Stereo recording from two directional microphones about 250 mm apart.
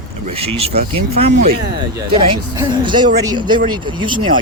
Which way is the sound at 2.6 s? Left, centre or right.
Centre.